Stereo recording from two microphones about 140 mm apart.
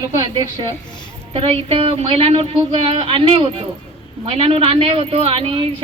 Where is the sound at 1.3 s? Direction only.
40° right (ahead or behind).